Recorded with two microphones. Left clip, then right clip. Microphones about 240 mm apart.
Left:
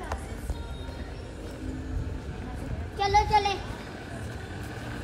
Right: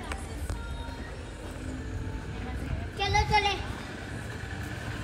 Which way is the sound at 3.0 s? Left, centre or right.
Centre.